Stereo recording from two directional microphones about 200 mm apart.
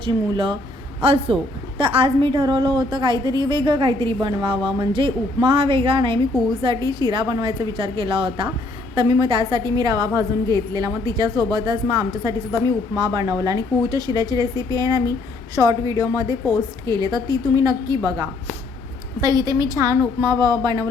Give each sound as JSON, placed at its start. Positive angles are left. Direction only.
{"t": 0.0, "sound": "a woman's voice", "side_deg": -25}